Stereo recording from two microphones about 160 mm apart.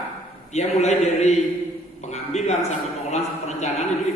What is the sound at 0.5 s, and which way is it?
A man's voice, 45° left (ahead or behind).